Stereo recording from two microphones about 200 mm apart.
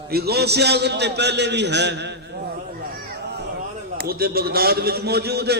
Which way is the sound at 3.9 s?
50° right (ahead or behind).